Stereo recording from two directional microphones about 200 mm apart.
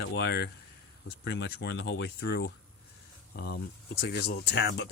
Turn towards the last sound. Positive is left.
turn(degrees=55)  # may be behind; listen again after turning